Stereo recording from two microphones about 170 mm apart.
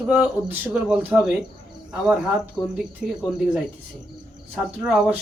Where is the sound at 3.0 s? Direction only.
5° right (ahead or behind).